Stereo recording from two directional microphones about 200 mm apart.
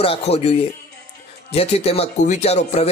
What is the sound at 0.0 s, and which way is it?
Speech, 30° left (ahead or behind).